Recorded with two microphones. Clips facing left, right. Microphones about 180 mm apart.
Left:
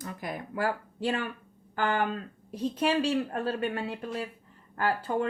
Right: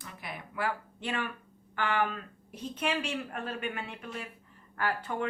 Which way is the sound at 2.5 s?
35° left (ahead or behind).